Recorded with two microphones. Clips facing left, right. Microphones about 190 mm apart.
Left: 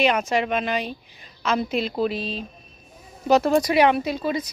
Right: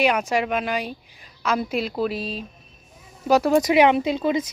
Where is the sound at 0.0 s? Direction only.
10° right (ahead or behind).